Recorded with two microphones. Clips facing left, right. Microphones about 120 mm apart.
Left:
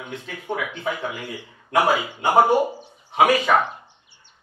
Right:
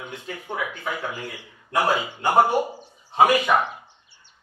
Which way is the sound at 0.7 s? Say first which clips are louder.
Left 2 dB; 15° left (ahead or behind).